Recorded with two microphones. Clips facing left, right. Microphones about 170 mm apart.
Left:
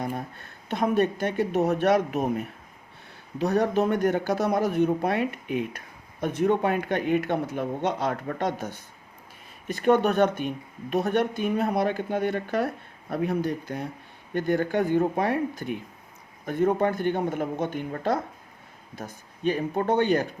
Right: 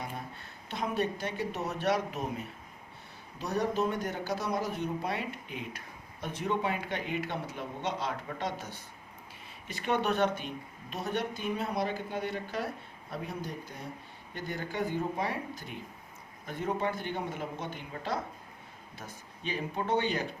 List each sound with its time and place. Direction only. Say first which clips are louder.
0.0 s a man's voice: left 9 dB; 50° left (ahead or behind)